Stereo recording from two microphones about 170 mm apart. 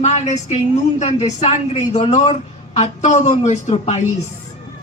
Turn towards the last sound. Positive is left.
turn(degrees=40)  # may be behind; listen again after turning